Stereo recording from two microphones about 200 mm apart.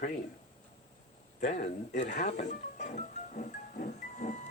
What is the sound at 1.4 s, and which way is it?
Speech, 35° left (ahead or behind).